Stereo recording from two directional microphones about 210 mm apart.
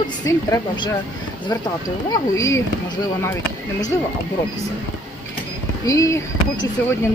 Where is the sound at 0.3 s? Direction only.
15° left (ahead or behind).